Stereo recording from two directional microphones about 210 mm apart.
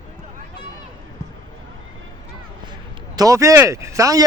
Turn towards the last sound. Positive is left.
turn(degrees=-15)  # may be behind; listen again after turning